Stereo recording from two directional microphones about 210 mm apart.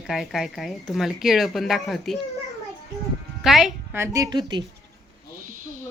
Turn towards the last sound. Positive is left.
turn(degrees=-20)  # may be behind; listen again after turning